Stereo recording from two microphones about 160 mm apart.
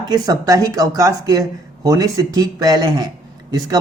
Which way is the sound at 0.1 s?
25° right (ahead or behind).